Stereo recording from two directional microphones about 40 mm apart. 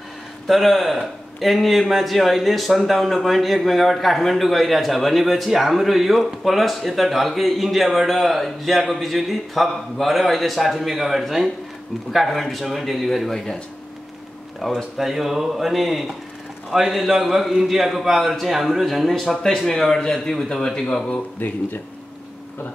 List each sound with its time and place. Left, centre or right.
0.5 s speech: centre
13.3 s speech: centre
14.6 s speech: centre
15.0 s a man's voice: centre
19.4 s speech: centre
21.4 s speech: left